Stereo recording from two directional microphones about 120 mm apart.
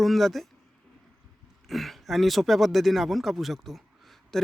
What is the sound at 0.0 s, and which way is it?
Speech, centre (ahead or behind).